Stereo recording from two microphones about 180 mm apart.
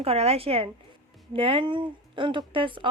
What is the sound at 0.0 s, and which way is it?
Speech, 35° right (ahead or behind).